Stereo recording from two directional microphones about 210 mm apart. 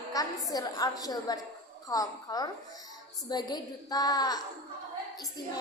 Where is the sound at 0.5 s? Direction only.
15° left (ahead or behind).